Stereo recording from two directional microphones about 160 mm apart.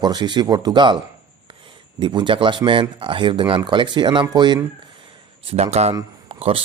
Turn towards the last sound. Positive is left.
turn(degrees=-35)  # may be behind; listen again after turning